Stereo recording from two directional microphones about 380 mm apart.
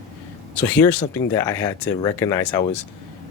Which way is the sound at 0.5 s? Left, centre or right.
Centre.